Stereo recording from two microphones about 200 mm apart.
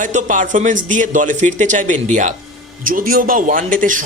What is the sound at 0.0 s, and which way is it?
Speech, 40° right (ahead or behind).